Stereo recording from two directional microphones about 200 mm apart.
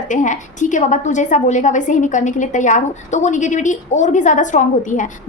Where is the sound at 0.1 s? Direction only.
40° left (ahead or behind).